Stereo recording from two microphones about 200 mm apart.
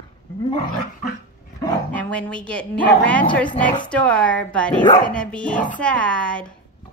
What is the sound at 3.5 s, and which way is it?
Speech, 40° left (ahead or behind).